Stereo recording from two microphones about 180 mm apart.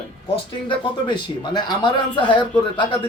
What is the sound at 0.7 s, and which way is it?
Speech, 25° left (ahead or behind).